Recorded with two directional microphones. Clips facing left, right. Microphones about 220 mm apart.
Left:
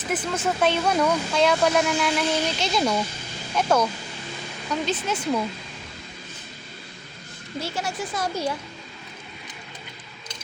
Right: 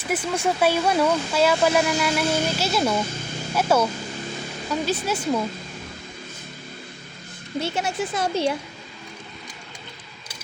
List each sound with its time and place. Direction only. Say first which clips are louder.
0.1 s speech: right 2 dB; 10° right (ahead or behind)
7.6 s speech: right 4 dB; 20° right (ahead or behind)